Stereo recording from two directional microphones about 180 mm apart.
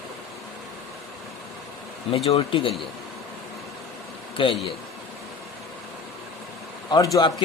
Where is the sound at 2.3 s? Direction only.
30° left (ahead or behind).